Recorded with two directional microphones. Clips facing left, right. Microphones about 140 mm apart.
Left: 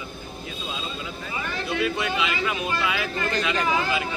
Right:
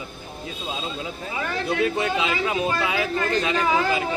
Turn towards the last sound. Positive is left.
turn(degrees=-35)  # may be behind; listen again after turning